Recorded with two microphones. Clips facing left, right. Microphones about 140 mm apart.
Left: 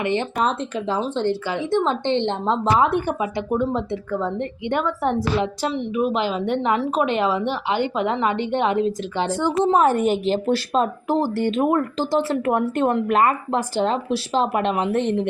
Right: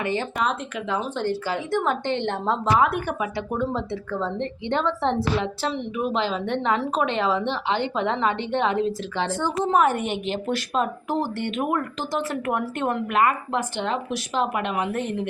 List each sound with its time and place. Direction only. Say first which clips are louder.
0.0 s a woman's voice: left 3 dB; 20° left (ahead or behind)
0.3 s a woman's voice: left 3 dB; 35° left (ahead or behind)